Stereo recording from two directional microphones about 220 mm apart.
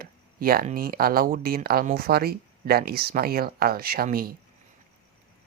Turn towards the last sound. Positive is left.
turn(degrees=-40)  # may be behind; listen again after turning